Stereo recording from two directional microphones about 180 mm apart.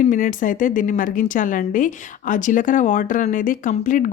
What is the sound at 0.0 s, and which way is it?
Speech, 45° left (ahead or behind).